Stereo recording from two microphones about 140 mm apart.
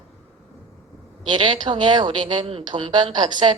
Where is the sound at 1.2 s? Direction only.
35° right (ahead or behind).